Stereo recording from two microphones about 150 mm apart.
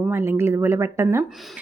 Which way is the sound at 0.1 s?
15° right (ahead or behind).